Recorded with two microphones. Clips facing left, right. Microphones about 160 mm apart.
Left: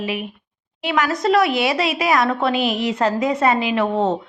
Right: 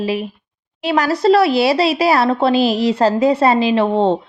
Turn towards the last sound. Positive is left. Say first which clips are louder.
# right 4 dB
turn(degrees=-30)  # may be behind; listen again after turning